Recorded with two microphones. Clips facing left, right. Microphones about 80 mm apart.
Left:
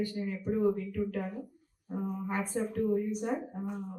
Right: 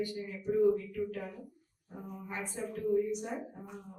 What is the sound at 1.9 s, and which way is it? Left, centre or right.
Speech, left.